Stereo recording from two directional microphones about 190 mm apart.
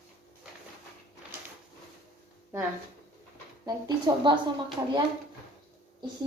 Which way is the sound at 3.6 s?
20° right (ahead or behind).